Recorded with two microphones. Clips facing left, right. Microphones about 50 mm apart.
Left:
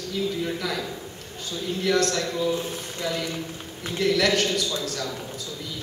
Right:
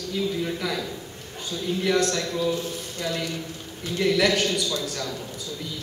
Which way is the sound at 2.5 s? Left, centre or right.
Left.